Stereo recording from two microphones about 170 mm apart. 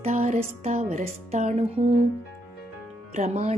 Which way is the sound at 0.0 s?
40° right (ahead or behind).